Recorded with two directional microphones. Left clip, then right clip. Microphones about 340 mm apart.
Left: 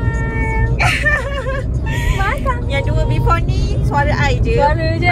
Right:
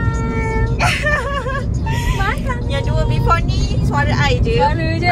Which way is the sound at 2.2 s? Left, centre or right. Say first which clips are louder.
Left 4 dB; centre.